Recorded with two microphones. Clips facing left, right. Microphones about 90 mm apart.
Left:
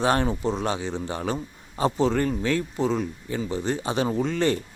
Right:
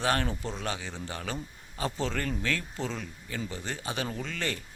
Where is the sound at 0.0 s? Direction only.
20° left (ahead or behind).